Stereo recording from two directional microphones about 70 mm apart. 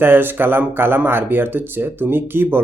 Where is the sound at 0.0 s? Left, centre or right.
Right.